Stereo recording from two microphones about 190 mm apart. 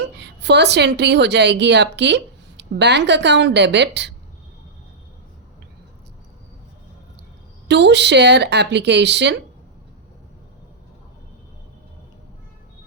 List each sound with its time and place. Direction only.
0.0 s a woman's voice: 65° right (ahead or behind)
7.7 s speech: 65° right (ahead or behind)